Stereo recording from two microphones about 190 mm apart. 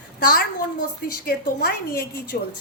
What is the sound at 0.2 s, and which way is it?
A woman's voice, 50° left (ahead or behind).